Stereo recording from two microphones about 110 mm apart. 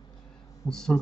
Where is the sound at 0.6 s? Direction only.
5° left (ahead or behind).